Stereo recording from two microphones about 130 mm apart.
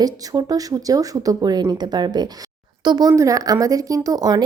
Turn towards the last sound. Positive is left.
turn(degrees=-30)  # may be behind; listen again after turning